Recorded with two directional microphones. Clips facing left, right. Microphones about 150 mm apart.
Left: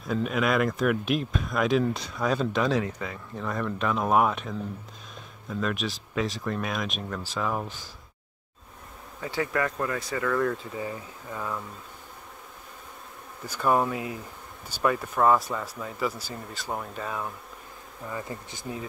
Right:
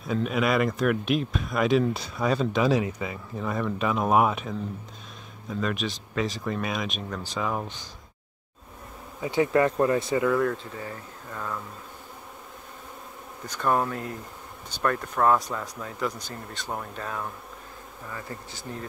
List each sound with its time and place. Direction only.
0.0 s speech: centre (ahead or behind)
9.2 s speech: 20° right (ahead or behind)
10.3 s speech: centre (ahead or behind)
10.7 s speech: 10° left (ahead or behind)
13.5 s speech: 5° left (ahead or behind)
18.1 s speech: 15° left (ahead or behind)